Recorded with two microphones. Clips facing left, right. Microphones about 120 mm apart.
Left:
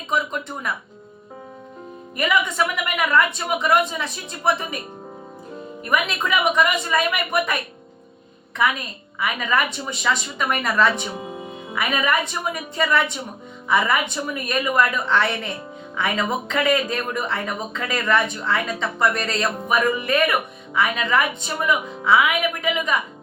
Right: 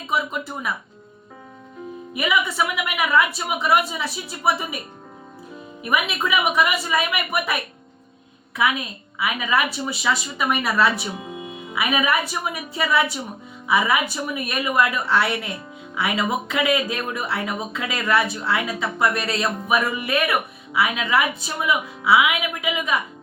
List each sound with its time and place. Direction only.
0.1 s a woman's voice: 5° right (ahead or behind)
2.1 s speech: 5° right (ahead or behind)
5.8 s a woman's voice: 5° right (ahead or behind)